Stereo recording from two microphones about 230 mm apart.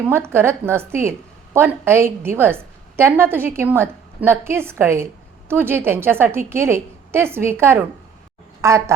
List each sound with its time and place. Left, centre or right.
0.0 s a woman's voice: centre